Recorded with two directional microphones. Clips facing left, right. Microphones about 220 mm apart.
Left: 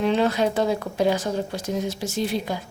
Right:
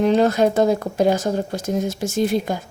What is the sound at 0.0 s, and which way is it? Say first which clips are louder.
A woman's voice: right 5 dB; 45° right (ahead or behind).